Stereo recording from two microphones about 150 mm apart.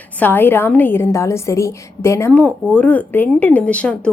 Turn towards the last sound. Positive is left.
turn(degrees=10)  # may be behind; listen again after turning